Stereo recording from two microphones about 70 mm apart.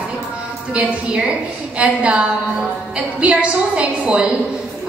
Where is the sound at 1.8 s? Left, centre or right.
Centre.